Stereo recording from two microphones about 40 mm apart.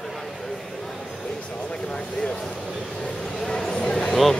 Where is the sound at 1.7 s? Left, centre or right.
Left.